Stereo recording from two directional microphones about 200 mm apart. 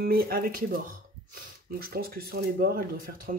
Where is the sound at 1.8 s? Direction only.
50° right (ahead or behind).